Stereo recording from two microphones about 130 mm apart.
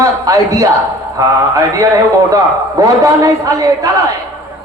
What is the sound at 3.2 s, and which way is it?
Speech, 25° right (ahead or behind).